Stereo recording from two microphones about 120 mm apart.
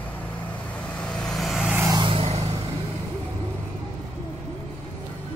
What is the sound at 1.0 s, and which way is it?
Vehicle, 5° left (ahead or behind).